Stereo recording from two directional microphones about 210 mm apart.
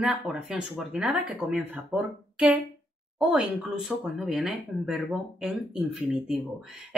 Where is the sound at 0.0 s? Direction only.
5° right (ahead or behind).